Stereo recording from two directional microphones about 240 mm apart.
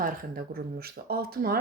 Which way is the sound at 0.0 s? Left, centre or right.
Right.